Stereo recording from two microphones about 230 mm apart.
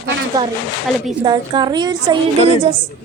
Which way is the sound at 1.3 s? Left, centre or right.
Centre.